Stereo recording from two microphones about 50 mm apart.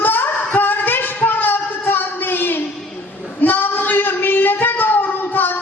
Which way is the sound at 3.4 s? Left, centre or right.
Left.